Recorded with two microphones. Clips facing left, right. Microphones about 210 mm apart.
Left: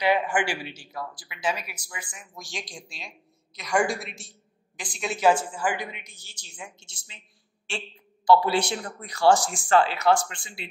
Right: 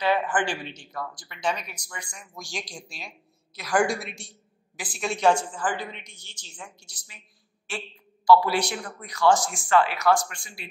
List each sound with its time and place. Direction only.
0.0 s a woman's voice: 15° left (ahead or behind)
6.8 s speech: 25° left (ahead or behind)